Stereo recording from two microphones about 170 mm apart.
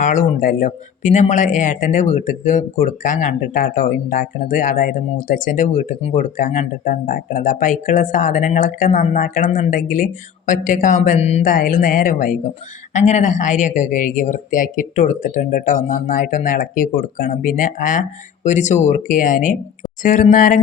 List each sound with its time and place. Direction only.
0.0 s speech: 50° left (ahead or behind)
11.4 s a woman's voice: 55° left (ahead or behind)